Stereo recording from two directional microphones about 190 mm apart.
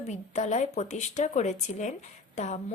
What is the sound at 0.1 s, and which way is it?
Speech, 40° left (ahead or behind).